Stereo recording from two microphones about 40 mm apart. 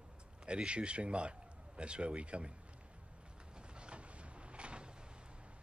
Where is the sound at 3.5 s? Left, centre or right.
Right.